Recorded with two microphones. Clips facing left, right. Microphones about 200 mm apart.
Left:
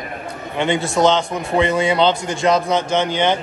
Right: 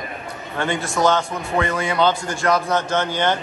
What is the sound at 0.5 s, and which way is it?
A man's voice, 20° left (ahead or behind).